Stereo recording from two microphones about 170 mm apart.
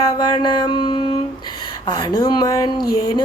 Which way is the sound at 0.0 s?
25° left (ahead or behind).